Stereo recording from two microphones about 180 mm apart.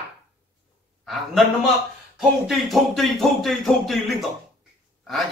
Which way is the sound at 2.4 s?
Centre (ahead or behind).